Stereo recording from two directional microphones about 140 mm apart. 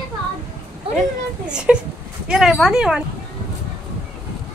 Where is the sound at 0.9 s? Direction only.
5° right (ahead or behind).